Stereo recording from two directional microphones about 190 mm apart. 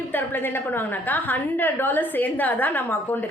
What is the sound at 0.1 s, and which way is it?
A woman's voice, 10° left (ahead or behind).